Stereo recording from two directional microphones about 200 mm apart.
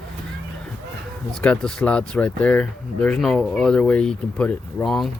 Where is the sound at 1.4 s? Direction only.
5° left (ahead or behind).